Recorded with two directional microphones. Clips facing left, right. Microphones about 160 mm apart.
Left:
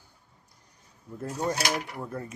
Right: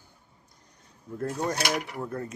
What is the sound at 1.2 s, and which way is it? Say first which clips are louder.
Speech: right 1 dB; 5° left (ahead or behind).